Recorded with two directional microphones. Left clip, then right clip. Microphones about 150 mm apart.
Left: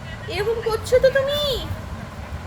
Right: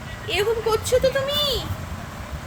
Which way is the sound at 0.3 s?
25° right (ahead or behind).